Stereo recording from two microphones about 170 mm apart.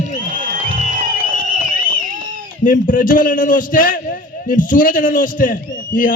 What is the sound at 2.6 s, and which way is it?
A man's voice, 50° left (ahead or behind).